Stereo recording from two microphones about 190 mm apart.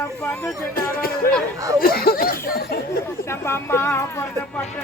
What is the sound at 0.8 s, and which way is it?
Speech, 50° left (ahead or behind).